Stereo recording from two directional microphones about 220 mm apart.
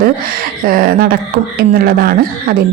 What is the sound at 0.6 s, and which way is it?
A woman's voice, 40° right (ahead or behind).